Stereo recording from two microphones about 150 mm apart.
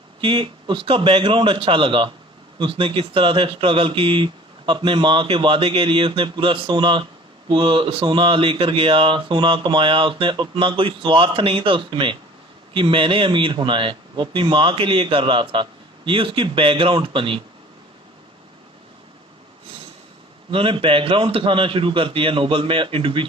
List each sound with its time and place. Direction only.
0.2 s speech: 35° right (ahead or behind)
20.5 s speech: 35° right (ahead or behind)